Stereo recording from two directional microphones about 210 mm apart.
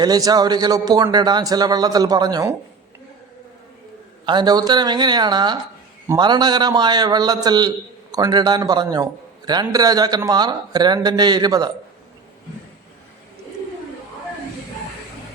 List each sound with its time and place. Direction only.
0.0 s a man's voice: 20° right (ahead or behind)
4.3 s a man's voice: 20° right (ahead or behind)